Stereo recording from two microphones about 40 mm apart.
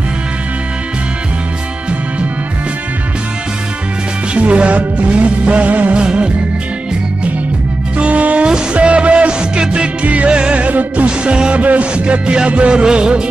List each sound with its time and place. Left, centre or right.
4.3 s music: right
5.9 s music: right
8.0 s music: right
10.0 s music: right
10.3 s music: right
10.7 s music: right
11.1 s music: right
11.6 s music: right